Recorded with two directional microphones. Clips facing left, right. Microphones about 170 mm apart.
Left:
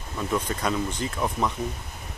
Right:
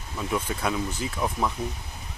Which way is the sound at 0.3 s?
5° right (ahead or behind).